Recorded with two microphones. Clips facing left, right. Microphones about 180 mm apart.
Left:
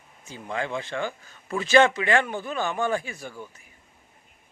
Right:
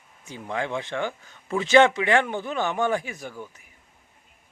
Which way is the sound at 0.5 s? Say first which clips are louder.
Right 1 dB; 15° right (ahead or behind).